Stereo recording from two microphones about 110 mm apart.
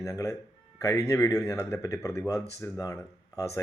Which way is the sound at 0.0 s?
30° left (ahead or behind).